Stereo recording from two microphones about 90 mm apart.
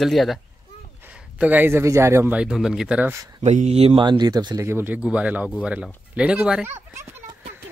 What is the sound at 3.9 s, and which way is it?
Speech, 60° right (ahead or behind).